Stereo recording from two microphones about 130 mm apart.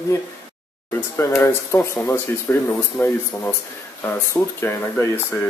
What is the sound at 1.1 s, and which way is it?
Speech, 20° left (ahead or behind).